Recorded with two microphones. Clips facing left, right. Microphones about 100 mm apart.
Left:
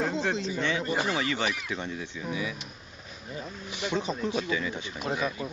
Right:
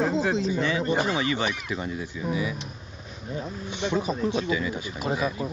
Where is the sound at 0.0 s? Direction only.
5° right (ahead or behind).